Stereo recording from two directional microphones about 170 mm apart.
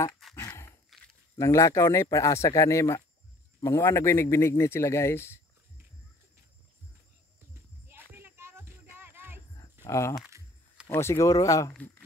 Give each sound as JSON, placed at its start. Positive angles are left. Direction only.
{"t": 0.4, "sound": "dog", "side_deg": 15}
{"t": 0.9, "sound": "a sound", "side_deg": 0}
{"t": 1.3, "sound": "speech", "side_deg": 20}
{"t": 7.9, "sound": "music", "side_deg": -10}
{"t": 9.8, "sound": "speech", "side_deg": 15}
{"t": 11.7, "sound": "speech", "side_deg": 10}